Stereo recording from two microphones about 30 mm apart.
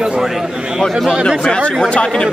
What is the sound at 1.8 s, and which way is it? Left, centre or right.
Speech, left.